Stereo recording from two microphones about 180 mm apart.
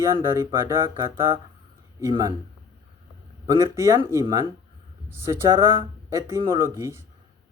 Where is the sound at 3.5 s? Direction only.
15° right (ahead or behind).